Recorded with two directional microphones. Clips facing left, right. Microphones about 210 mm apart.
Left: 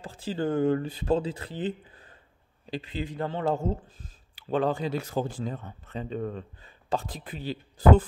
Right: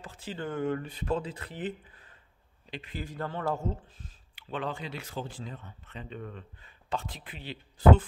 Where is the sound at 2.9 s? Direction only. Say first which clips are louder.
Left 4 dB; 20° left (ahead or behind).